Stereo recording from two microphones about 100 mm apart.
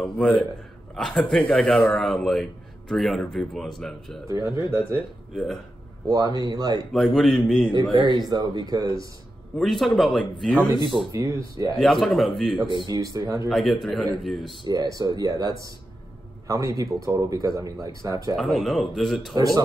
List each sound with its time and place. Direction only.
0.0 s speech: 5° left (ahead or behind)
4.3 s a man's voice: 35° right (ahead or behind)
5.3 s speech: 5° right (ahead or behind)
6.0 s a man's voice: 40° right (ahead or behind)
6.9 s speech: centre (ahead or behind)
7.9 s a man's voice: 45° right (ahead or behind)
9.6 s speech: centre (ahead or behind)
10.9 s speech: 10° right (ahead or behind)
11.7 s speech: centre (ahead or behind)
12.8 s a man's voice: 40° right (ahead or behind)
13.5 s speech: centre (ahead or behind)
14.7 s a man's voice: 40° right (ahead or behind)
18.3 s speech: centre (ahead or behind)
19.3 s a man's voice: 40° right (ahead or behind)